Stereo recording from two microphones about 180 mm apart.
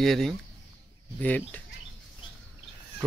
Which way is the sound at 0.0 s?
Centre (ahead or behind).